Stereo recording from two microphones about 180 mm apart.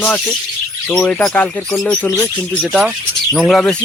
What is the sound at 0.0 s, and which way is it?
Speech, 10° left (ahead or behind).